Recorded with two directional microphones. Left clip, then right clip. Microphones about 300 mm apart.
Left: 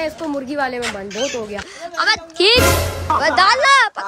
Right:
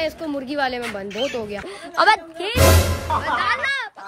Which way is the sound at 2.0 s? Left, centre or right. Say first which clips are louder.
Right 2 dB; centre.